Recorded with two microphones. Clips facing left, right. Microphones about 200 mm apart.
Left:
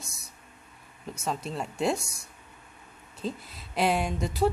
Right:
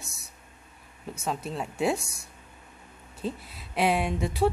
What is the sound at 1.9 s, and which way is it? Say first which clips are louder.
Speech: right 1 dB; 60° right (ahead or behind).